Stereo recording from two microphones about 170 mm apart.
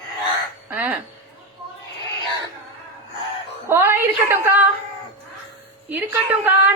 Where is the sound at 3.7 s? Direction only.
15° right (ahead or behind).